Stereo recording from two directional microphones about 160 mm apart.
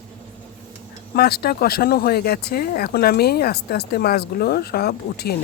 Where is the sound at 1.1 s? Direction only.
75° left (ahead or behind).